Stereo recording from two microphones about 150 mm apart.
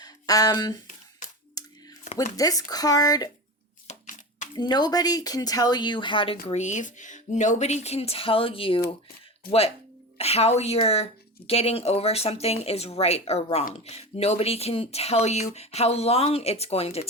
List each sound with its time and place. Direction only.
0.0 s speech: 25° left (ahead or behind)
1.6 s a sound: 25° left (ahead or behind)
2.3 s speech: 25° left (ahead or behind)
3.8 s a sound: 55° left (ahead or behind)
4.5 s speech: 30° left (ahead or behind)
6.5 s speech: 50° left (ahead or behind)